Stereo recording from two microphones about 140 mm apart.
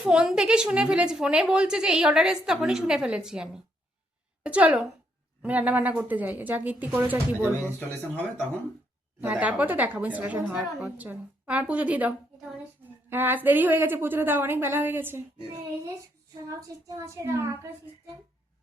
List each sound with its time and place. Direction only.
0.0 s a woman's voice: 5° right (ahead or behind)
9.2 s a woman's voice: 10° right (ahead or behind)
16.5 s a child's voice: 25° right (ahead or behind)